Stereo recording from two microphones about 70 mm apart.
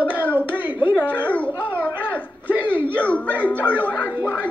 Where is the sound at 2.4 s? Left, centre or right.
Left.